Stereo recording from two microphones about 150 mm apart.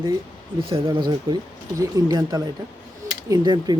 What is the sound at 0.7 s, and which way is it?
Speech, 35° right (ahead or behind).